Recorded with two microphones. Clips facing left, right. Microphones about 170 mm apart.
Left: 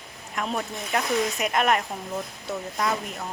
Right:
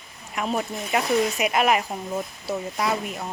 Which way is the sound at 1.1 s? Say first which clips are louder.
Right 3 dB; 15° right (ahead or behind).